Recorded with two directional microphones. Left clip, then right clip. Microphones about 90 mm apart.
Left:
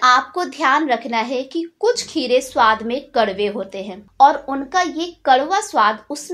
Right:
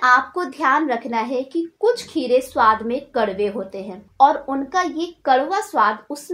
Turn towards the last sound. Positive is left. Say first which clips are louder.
# left 2 dB
turn(degrees=15)  # may be behind; listen again after turning